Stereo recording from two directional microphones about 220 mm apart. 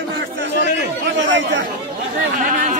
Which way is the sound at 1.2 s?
55° right (ahead or behind).